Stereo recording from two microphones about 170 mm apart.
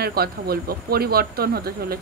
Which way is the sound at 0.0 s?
65° right (ahead or behind).